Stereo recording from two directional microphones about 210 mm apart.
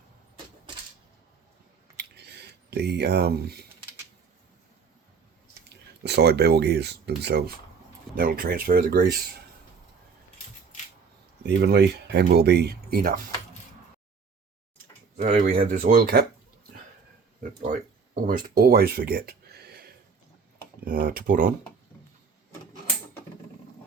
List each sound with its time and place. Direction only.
2.0 s a sound: 50° right (ahead or behind)
5.6 s speech: 55° right (ahead or behind)
11.4 s speech: 55° right (ahead or behind)
15.2 s speech: 40° right (ahead or behind)
17.6 s speech: 40° right (ahead or behind)